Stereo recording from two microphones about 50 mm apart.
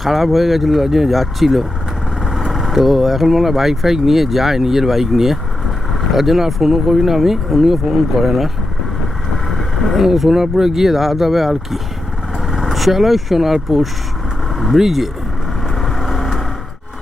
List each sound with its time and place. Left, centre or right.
0.0 s speech: centre
9.5 s speech: centre
15.8 s vehicle: centre